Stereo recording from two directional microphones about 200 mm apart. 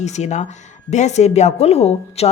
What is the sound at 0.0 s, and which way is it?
A woman's voice, 35° left (ahead or behind).